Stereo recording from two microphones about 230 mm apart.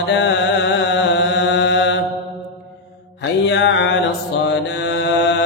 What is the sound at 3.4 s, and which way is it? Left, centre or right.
Music, left.